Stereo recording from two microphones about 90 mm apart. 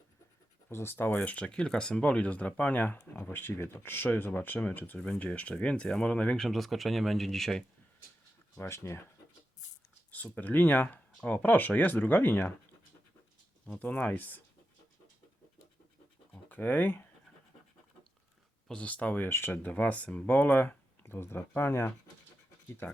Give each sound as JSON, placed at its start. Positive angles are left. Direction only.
{"t": 0.7, "sound": "speech", "side_deg": 30}
{"t": 8.5, "sound": "speech", "side_deg": 30}
{"t": 10.1, "sound": "speech", "side_deg": 15}
{"t": 13.7, "sound": "speech", "side_deg": 15}
{"t": 16.5, "sound": "speech", "side_deg": 20}
{"t": 18.7, "sound": "speech", "side_deg": 15}